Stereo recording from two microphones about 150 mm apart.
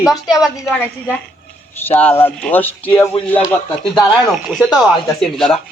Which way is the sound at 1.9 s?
10° left (ahead or behind).